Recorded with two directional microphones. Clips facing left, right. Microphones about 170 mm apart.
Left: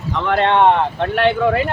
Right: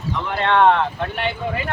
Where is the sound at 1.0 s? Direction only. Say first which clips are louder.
Left 9 dB; 75° left (ahead or behind).